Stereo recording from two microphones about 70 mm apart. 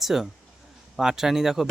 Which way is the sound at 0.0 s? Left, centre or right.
Centre.